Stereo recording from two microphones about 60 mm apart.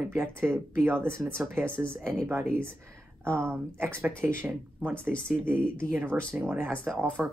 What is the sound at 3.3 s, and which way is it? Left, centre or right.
Speech, right.